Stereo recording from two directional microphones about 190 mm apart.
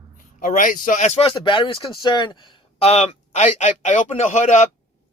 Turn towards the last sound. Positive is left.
turn(degrees=35)  # may be behind; listen again after turning